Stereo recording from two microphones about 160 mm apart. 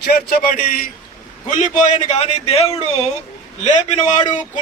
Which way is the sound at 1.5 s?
50° left (ahead or behind).